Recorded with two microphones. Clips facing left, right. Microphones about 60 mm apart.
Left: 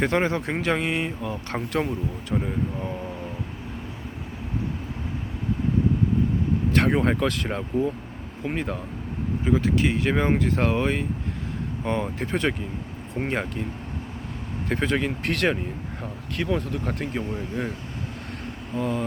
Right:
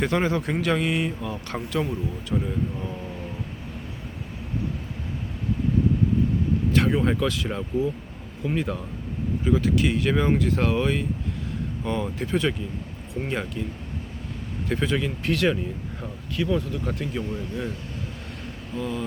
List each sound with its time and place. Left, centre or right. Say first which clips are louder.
0.0 s speech: left 1 dB; left
1.5 s speech: left 1 dB; left
6.7 s speech: left 1 dB; left
8.4 s speech: right 2 dB; left
14.7 s speech: left 1 dB; left
18.7 s speech: left 3 dB; left